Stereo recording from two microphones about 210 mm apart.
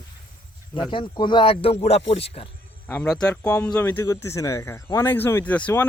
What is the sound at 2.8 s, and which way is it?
Speech, 10° left (ahead or behind).